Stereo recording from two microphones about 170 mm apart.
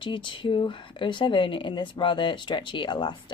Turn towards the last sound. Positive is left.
turn(degrees=30)  # may be behind; listen again after turning